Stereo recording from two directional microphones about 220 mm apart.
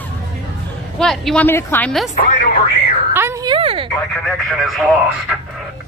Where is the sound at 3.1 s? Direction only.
10° right (ahead or behind).